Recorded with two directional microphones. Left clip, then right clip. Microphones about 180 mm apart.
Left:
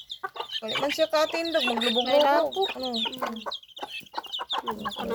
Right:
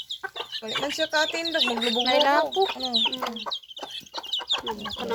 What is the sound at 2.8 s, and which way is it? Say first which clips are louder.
Speech: right 5 dB; 40° left (ahead or behind).